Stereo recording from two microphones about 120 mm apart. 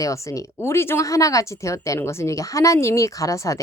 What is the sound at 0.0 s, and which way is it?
Speech, 25° left (ahead or behind).